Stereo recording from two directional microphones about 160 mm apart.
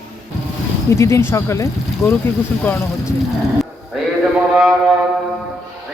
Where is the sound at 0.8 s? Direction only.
15° left (ahead or behind).